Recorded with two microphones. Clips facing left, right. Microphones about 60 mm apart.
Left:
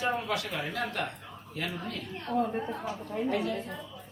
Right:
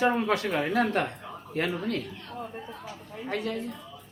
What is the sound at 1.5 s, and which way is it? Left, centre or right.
Speech, right.